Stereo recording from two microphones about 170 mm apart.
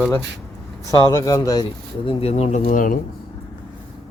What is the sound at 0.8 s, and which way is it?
Speech, 20° left (ahead or behind).